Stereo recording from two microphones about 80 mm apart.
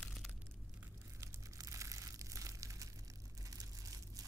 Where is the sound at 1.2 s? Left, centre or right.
Right.